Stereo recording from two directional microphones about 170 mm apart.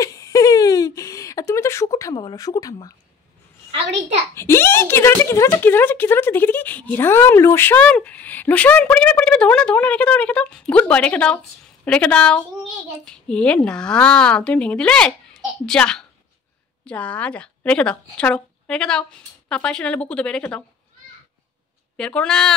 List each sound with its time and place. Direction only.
0.0 s a sound: 20° left (ahead or behind)
4.4 s speech: 15° left (ahead or behind)
21.9 s speech: 5° left (ahead or behind)